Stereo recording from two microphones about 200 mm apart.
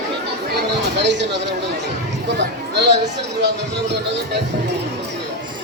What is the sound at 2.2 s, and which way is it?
Speech, 60° right (ahead or behind).